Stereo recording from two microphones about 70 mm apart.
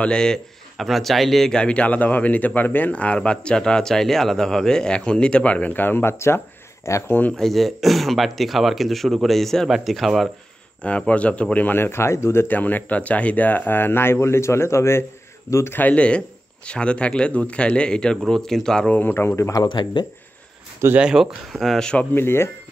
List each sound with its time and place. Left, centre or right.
0.0 s speech: centre; by 7.1 s left
7.1 s speech: left
7.3 s speech: centre
10.8 s speech: centre; by 15.8 s left
15.8 s speech: centre
18.9 s speech: left
19.5 s speech: left
21.0 s speech: centre
22.1 s speech: left